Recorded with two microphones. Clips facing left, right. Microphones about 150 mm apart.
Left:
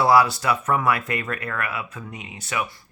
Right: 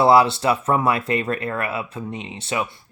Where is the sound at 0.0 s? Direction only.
25° right (ahead or behind).